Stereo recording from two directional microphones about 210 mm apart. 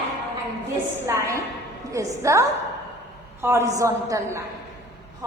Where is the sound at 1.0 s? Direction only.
15° right (ahead or behind).